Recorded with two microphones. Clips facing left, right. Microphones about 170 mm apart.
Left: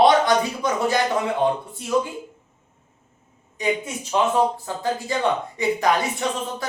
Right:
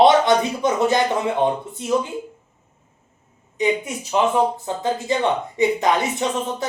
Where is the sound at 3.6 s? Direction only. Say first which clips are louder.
Right 4 dB; 20° right (ahead or behind).